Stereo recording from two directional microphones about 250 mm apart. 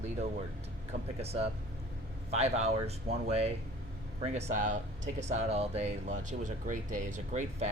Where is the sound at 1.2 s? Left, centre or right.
Right.